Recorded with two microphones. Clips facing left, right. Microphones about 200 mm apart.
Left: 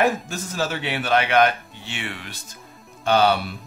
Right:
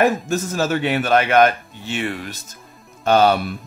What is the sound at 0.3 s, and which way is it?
Speech, 45° right (ahead or behind).